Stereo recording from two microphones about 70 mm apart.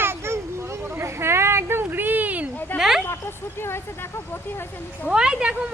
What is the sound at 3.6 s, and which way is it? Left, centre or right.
Speech, left.